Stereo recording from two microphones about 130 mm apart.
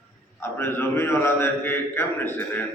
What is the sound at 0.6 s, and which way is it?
A man's voice, 20° left (ahead or behind).